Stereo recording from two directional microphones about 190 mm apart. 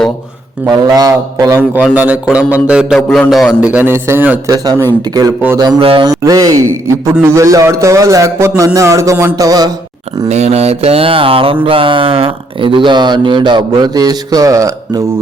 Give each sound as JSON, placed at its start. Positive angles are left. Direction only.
{"t": 0.7, "sound": "a man's voice", "side_deg": -20}
{"t": 10.2, "sound": "mantra", "side_deg": -35}
{"t": 11.6, "sound": "speech", "side_deg": -30}